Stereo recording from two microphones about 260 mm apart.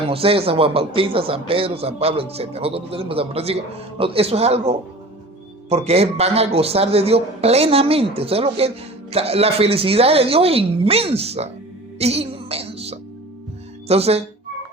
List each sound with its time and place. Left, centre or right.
0.1 s a man's voice: right
11.9 s music: right
13.8 s a man's voice: right